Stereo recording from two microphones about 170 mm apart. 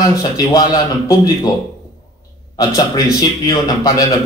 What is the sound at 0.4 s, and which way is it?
A man's voice, 20° left (ahead or behind).